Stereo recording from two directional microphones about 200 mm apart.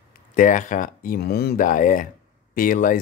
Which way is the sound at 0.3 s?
40° left (ahead or behind).